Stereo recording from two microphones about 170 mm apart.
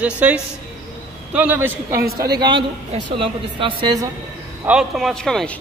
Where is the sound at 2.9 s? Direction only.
30° right (ahead or behind).